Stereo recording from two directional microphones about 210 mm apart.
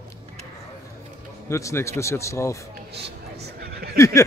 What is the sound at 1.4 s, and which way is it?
Speech, 15° left (ahead or behind).